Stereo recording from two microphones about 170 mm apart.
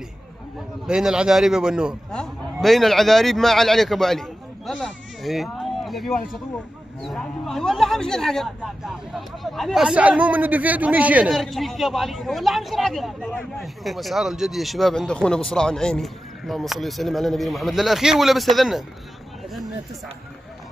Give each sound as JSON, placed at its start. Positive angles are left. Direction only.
{"t": 0.8, "sound": "a man's voice", "side_deg": -5}